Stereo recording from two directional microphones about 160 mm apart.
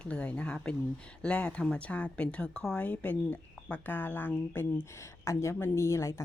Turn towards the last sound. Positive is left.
turn(degrees=20)  # may be behind; listen again after turning